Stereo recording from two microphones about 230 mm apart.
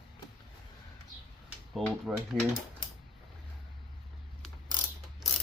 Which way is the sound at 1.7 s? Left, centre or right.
Centre.